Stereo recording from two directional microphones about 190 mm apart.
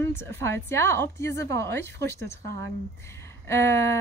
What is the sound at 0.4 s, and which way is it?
A woman's voice, 15° left (ahead or behind).